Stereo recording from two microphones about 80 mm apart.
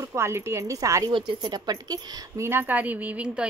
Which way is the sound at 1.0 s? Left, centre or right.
Right.